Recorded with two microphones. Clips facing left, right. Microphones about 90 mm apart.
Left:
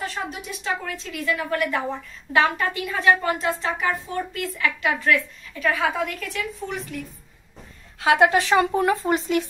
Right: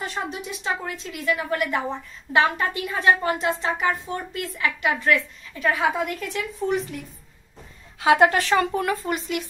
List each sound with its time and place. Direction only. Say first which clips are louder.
0.0 s a woman's voice: even; 20° right (ahead or behind)
8.0 s a woman's voice: right 1 dB; centre (ahead or behind)
8.4 s speech: left 2 dB; 15° left (ahead or behind)